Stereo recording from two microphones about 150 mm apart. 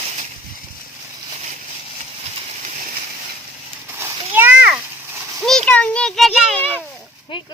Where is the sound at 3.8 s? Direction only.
15° right (ahead or behind).